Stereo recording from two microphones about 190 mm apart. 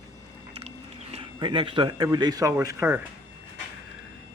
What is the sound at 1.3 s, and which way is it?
Speech, 25° right (ahead or behind).